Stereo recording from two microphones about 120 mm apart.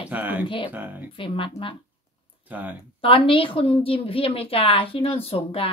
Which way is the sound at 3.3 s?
45° left (ahead or behind).